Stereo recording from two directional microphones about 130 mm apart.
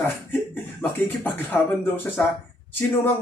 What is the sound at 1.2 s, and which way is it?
Speech, 15° left (ahead or behind).